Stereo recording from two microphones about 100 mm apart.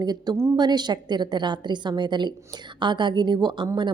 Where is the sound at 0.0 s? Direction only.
45° right (ahead or behind).